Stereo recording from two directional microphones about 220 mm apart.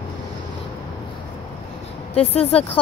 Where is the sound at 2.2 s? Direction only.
25° left (ahead or behind).